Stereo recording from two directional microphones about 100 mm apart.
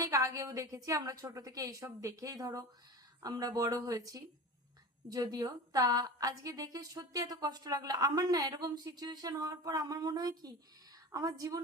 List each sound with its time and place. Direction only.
0.0 s a woman's voice: 30° right (ahead or behind)